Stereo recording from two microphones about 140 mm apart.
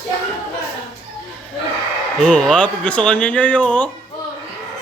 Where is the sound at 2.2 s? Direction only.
5° left (ahead or behind).